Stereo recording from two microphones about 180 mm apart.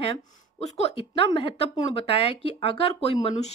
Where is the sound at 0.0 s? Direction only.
30° left (ahead or behind).